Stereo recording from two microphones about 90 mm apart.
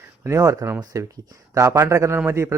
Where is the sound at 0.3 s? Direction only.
35° right (ahead or behind).